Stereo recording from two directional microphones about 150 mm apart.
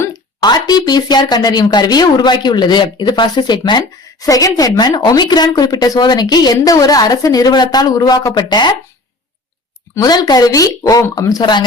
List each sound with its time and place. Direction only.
0.4 s speech: 25° left (ahead or behind)
9.9 s speech: 25° left (ahead or behind)